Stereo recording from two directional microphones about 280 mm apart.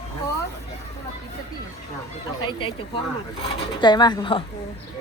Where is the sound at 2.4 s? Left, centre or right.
Centre.